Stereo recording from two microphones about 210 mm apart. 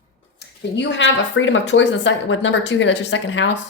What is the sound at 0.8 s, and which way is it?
Speech, 60° left (ahead or behind).